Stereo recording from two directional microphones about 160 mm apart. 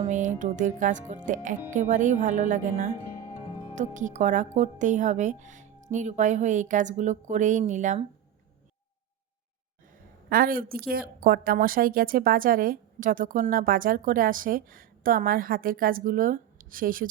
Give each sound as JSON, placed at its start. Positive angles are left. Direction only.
{"t": 0.1, "sound": "speech", "side_deg": -50}
{"t": 10.2, "sound": "a woman's voice", "side_deg": -65}